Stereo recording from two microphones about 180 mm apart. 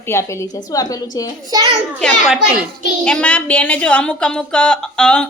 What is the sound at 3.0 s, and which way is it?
A woman's voice, 5° left (ahead or behind).